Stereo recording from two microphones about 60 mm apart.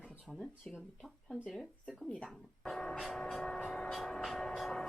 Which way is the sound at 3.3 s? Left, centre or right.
Centre.